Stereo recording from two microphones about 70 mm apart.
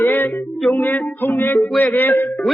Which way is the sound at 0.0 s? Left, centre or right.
Left.